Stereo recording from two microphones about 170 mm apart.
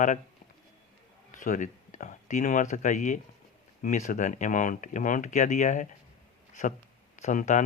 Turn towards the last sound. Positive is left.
turn(degrees=45)  # may be behind; listen again after turning